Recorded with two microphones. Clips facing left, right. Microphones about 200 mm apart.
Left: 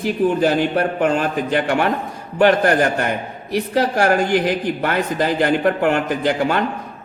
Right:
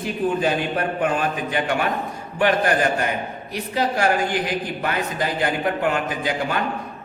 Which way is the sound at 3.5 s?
70° left (ahead or behind).